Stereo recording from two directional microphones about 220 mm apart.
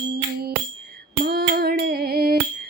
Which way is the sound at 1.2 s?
45° right (ahead or behind).